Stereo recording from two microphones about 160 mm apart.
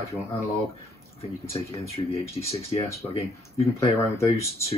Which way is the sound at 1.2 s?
40° left (ahead or behind).